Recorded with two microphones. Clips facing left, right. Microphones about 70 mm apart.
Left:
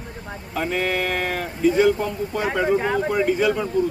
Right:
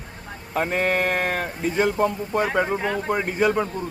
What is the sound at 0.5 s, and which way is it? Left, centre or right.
A man's voice, right.